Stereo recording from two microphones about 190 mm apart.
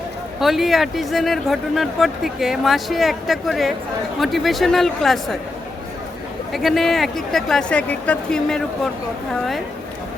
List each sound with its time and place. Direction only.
0.3 s speech: centre (ahead or behind)
6.5 s speech: centre (ahead or behind)